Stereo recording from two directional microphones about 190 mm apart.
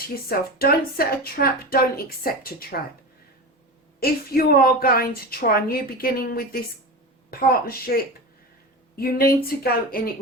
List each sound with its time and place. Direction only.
0.3 s a woman's voice: 50° left (ahead or behind)
4.0 s a woman's voice: 50° left (ahead or behind)
9.0 s a woman's voice: 50° left (ahead or behind)